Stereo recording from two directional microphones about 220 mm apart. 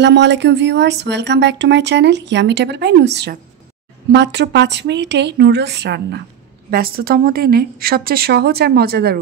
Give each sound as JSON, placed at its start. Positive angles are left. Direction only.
{"t": 0.0, "sound": "speech", "side_deg": -50}